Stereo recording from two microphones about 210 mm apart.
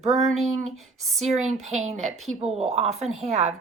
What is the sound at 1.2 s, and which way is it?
Speech, 30° right (ahead or behind).